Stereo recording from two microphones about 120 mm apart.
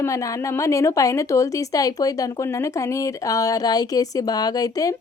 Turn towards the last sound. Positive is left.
turn(degrees=30)  # may be behind; listen again after turning